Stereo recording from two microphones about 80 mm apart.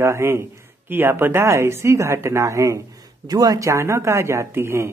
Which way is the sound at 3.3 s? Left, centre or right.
Right.